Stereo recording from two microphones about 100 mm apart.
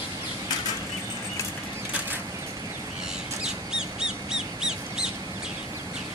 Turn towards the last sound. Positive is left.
turn(degrees=-5)  # may be behind; listen again after turning